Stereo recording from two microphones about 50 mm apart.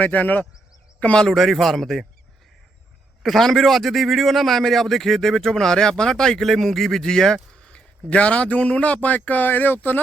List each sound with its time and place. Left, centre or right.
0.0 s speech: left
1.3 s a man's voice: centre
3.2 s a man's voice: centre; by 10.0 s left